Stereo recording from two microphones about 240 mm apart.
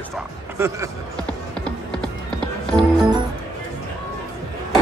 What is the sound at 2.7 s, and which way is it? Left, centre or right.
Speech, centre.